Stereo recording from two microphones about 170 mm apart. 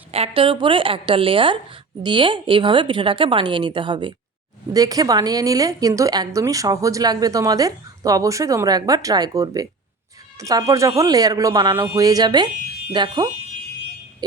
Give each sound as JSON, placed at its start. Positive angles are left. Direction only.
{"t": 0.1, "sound": "a woman's voice", "side_deg": -35}